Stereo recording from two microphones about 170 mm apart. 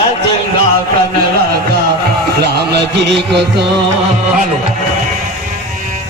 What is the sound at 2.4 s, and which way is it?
Music, 75° right (ahead or behind).